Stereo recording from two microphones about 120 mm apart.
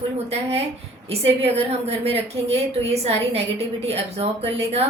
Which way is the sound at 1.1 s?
55° right (ahead or behind).